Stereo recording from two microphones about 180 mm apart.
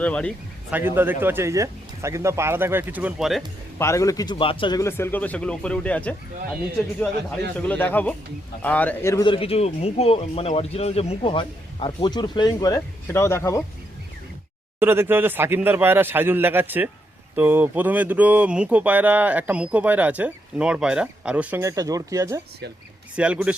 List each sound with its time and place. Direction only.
0.0 s speech: 5° left (ahead or behind)
0.7 s speech: 10° right (ahead or behind)
3.8 s speech: 15° left (ahead or behind)
4.8 s speech: 15° left (ahead or behind)
7.7 s speech: 10° left (ahead or behind)
9.2 s speech: 30° left (ahead or behind); by 13.7 s 15° left (ahead or behind)
14.8 s speech: 10° right (ahead or behind)
23.1 s speech: 5° right (ahead or behind)